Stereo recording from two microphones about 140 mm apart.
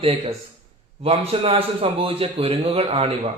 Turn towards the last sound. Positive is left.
turn(degrees=-45)  # may be behind; listen again after turning